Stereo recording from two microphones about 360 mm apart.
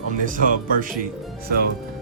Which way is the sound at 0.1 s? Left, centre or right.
Right.